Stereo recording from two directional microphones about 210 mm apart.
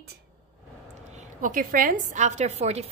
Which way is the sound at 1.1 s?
40° right (ahead or behind).